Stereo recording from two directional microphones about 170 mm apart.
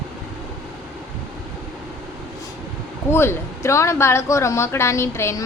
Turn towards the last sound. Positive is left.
turn(degrees=15)  # may be behind; listen again after turning